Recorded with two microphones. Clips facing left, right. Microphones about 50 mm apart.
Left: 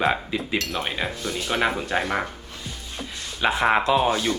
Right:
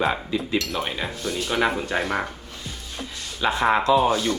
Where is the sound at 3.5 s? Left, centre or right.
Centre.